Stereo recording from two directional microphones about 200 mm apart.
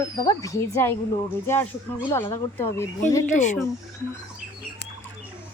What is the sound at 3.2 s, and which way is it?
Speech, 40° left (ahead or behind).